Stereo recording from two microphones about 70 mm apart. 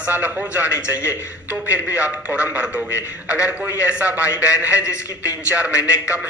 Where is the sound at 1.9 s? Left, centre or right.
Centre.